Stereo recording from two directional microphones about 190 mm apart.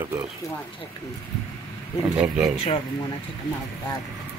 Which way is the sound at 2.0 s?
5° right (ahead or behind).